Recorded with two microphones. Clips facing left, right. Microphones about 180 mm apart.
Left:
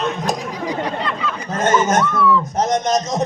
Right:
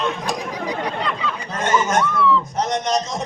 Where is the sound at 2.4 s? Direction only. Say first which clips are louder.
Left 4 dB; 40° left (ahead or behind).